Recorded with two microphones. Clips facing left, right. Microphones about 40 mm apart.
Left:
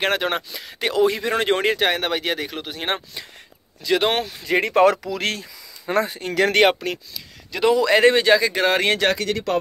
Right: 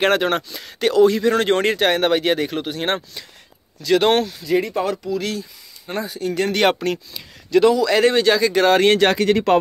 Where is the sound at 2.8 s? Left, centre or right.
Centre.